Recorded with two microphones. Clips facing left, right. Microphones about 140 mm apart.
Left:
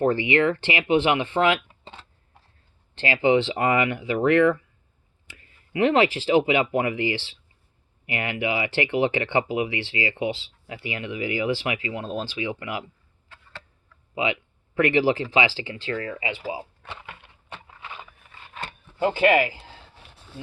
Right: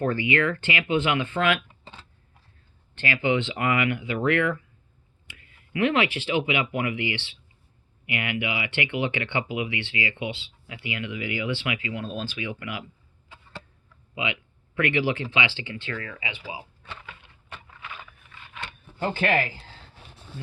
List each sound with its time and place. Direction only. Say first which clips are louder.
0.0 s speech: left 4 dB; 30° left (ahead or behind)
13.2 s a sound: right 2 dB; 10° right (ahead or behind)
14.8 s speech: left 5 dB; 35° left (ahead or behind)
19.2 s speech: left 6 dB; 10° left (ahead or behind)